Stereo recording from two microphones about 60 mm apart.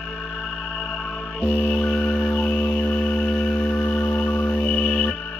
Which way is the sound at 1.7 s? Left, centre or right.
Centre.